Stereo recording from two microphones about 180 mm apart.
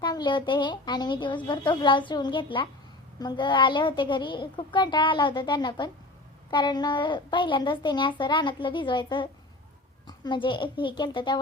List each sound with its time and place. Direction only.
0.0 s a woman's voice: 25° left (ahead or behind)